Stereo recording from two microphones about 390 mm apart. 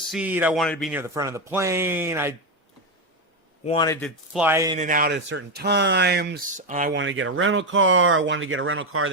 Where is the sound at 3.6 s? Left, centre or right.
Centre.